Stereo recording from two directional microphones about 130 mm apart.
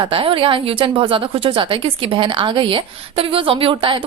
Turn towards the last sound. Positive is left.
turn(degrees=-40)  # may be behind; listen again after turning